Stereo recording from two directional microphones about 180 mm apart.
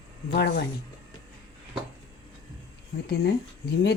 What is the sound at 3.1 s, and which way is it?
Speech, 60° left (ahead or behind).